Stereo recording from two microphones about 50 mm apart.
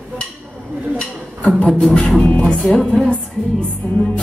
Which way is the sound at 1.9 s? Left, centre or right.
Centre.